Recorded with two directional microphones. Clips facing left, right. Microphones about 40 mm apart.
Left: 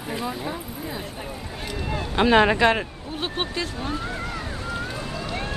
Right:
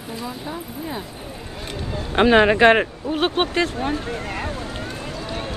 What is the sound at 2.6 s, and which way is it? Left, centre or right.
Speech, right.